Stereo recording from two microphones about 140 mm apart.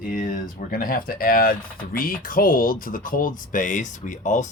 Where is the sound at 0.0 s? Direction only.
70° left (ahead or behind).